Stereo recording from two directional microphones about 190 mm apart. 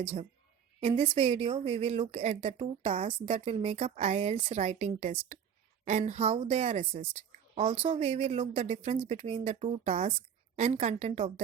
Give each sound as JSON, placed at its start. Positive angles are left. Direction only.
{"t": 0.0, "sound": "a woman's voice", "side_deg": -30}